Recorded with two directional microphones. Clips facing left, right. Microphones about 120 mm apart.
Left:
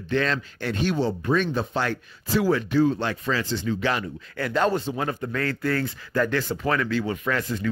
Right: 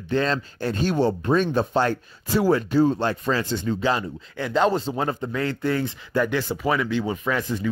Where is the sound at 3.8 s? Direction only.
25° right (ahead or behind).